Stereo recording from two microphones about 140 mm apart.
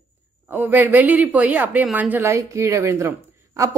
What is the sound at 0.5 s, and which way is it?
Speech, 15° right (ahead or behind).